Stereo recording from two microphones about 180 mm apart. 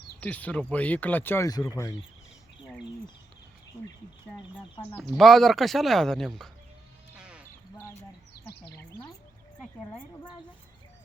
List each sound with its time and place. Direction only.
0.2 s speech: 10° left (ahead or behind)
4.9 s speech: centre (ahead or behind)
7.2 s basketball bounce: 5° right (ahead or behind)